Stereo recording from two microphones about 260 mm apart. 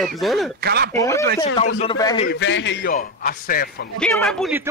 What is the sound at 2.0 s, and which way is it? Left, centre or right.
Speech, centre.